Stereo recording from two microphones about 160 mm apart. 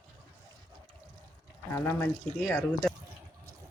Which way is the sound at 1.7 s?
15° left (ahead or behind).